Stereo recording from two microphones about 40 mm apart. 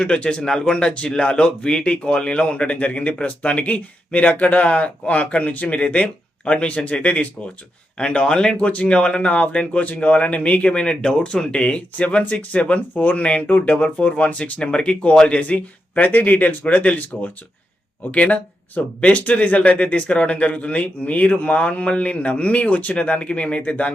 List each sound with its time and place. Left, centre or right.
0.0 s speech: left
11.9 s speech: left
12.9 s speech: left
14.6 s speech: left
16.0 s speech: left
16.6 s speech: left